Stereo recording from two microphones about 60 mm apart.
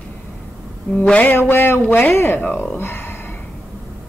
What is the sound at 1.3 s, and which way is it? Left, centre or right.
Speech, left.